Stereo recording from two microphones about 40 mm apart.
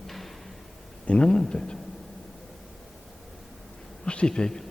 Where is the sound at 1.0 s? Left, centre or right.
Left.